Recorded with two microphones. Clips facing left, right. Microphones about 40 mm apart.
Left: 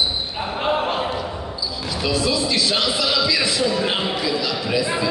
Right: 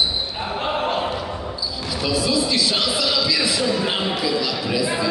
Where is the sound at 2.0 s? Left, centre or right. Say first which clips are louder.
Even; centre.